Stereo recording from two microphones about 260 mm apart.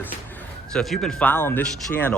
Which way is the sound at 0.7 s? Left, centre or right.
Centre.